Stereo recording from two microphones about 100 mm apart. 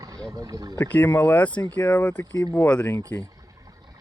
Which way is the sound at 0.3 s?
40° right (ahead or behind).